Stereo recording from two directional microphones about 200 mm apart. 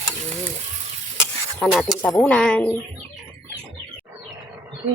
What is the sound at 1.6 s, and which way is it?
Speech, centre (ahead or behind).